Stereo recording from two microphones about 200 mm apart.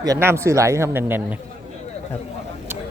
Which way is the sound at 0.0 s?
15° right (ahead or behind).